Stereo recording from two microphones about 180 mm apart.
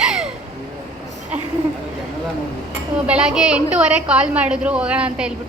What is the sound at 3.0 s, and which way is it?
A woman's voice, 5° right (ahead or behind).